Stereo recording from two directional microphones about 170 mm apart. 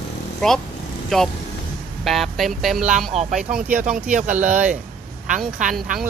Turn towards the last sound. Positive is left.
turn(degrees=-55)  # may be behind; listen again after turning